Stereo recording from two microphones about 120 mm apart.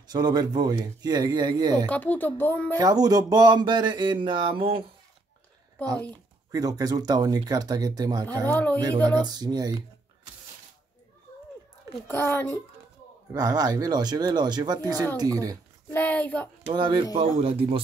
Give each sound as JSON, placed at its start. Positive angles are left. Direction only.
{"t": 0.1, "sound": "speech", "side_deg": -35}
{"t": 1.9, "sound": "speech", "side_deg": 15}
{"t": 2.8, "sound": "speech", "side_deg": -30}
{"t": 6.5, "sound": "speech", "side_deg": -30}
{"t": 8.5, "sound": "speech", "side_deg": 15}
{"t": 9.0, "sound": "speech", "side_deg": -35}
{"t": 12.1, "sound": "speech", "side_deg": 15}
{"t": 13.3, "sound": "speech", "side_deg": -30}
{"t": 15.9, "sound": "speech", "side_deg": 15}
{"t": 16.6, "sound": "speech", "side_deg": -40}